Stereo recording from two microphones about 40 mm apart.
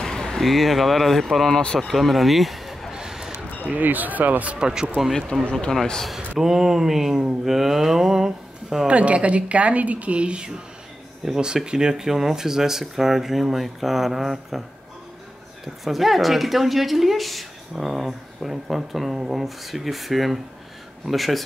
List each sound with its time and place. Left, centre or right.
0.0 s a sound: centre
0.4 s speech: centre
2.9 s a sound: centre
3.6 s speech: right
4.5 s speech: right
5.5 s a man's voice: centre
6.4 s speech: centre
8.8 s a woman's voice: right
11.2 s speech: centre
15.6 s speech: centre